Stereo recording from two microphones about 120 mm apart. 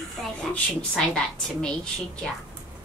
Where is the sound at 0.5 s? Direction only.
10° left (ahead or behind).